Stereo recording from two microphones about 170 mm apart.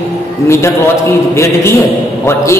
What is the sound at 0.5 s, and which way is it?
A man's voice, 15° left (ahead or behind).